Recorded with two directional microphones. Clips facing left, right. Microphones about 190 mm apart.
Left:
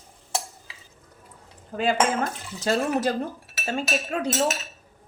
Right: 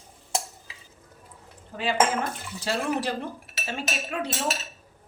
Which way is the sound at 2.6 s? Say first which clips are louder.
Left 4 dB; 45° left (ahead or behind).